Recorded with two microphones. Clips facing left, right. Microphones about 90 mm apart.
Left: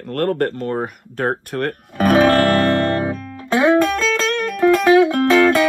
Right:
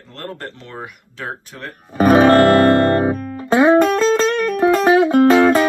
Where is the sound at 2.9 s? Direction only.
40° right (ahead or behind).